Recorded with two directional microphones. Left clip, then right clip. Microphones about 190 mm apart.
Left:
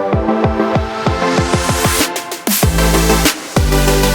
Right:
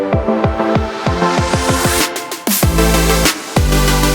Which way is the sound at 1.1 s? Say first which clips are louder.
Even; centre (ahead or behind).